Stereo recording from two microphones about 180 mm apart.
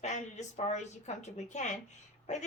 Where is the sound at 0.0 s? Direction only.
40° left (ahead or behind).